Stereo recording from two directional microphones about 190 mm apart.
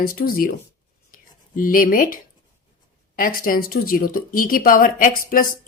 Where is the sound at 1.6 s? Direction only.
50° left (ahead or behind).